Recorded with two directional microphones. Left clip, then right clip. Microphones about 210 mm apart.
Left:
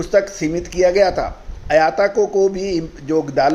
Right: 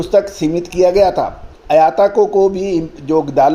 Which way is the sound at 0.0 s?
35° right (ahead or behind).